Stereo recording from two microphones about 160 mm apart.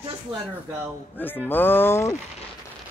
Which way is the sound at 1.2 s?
10° left (ahead or behind).